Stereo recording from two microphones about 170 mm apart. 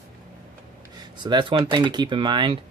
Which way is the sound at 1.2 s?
25° right (ahead or behind).